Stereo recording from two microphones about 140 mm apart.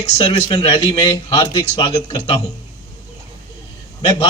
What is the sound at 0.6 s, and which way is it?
A man's voice, 35° left (ahead or behind).